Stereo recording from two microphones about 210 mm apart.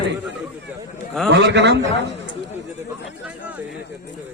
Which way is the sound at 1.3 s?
55° right (ahead or behind).